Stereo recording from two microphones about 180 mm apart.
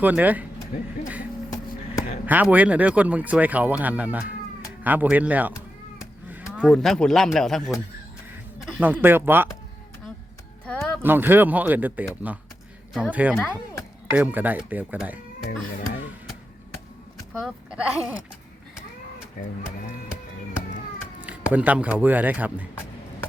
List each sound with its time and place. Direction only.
0.0 s speech: 10° right (ahead or behind)
2.2 s speech: 10° right (ahead or behind)
6.6 s speech: centre (ahead or behind)
8.6 s speech: 10° right (ahead or behind)
10.7 s music: 5° left (ahead or behind)
11.0 s speech: 10° right (ahead or behind)
17.3 s speech: 5° right (ahead or behind)
21.5 s speech: 10° right (ahead or behind)